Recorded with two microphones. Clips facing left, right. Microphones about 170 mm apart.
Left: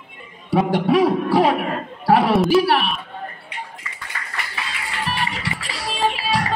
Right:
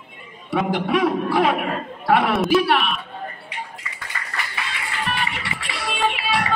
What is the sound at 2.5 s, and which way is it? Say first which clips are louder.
Speech: left 2 dB; 35° left (ahead or behind).